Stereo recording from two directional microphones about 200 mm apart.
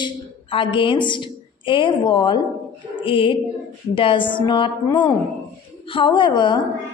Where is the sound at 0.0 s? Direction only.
25° left (ahead or behind).